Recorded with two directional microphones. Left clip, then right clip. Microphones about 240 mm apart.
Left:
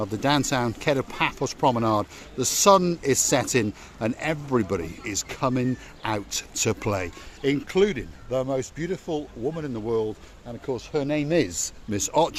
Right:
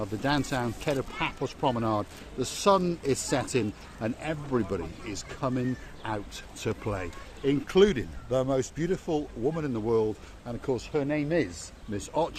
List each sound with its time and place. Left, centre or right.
0.0 s speech: left
7.7 s speech: centre
10.9 s speech: left